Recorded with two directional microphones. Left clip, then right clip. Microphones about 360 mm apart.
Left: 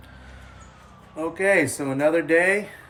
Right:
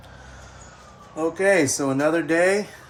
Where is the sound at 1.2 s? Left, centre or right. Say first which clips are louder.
Right 1 dB; centre.